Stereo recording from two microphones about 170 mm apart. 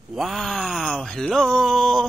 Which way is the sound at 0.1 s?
Centre (ahead or behind).